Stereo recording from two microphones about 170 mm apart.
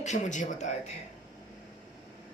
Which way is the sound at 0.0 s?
45° left (ahead or behind).